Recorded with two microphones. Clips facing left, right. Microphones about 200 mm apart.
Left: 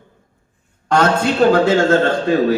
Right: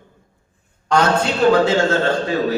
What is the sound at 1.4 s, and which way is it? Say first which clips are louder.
Speech: left 1 dB; 50° left (ahead or behind).